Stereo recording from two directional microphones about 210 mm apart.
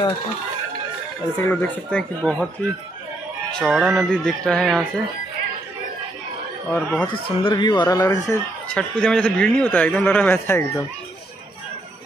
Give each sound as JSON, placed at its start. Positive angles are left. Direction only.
{"t": 1.4, "sound": "a man's voice", "side_deg": 10}
{"t": 3.5, "sound": "speech", "side_deg": 0}
{"t": 6.7, "sound": "speech", "side_deg": 5}
{"t": 7.1, "sound": "speech", "side_deg": 25}
{"t": 8.7, "sound": "a man's voice", "side_deg": 5}